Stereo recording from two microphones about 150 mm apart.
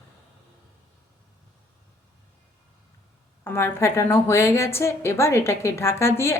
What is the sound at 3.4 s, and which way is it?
A woman's voice, 15° left (ahead or behind).